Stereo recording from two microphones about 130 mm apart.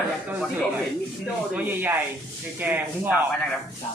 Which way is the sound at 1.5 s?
15° right (ahead or behind).